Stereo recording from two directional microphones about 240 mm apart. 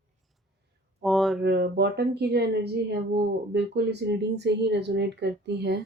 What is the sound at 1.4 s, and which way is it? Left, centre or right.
Speech, right.